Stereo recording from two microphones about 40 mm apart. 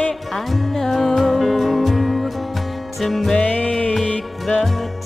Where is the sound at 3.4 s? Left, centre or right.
Left.